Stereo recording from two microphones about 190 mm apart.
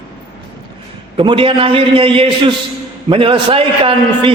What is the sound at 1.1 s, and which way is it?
A man's voice, 25° right (ahead or behind).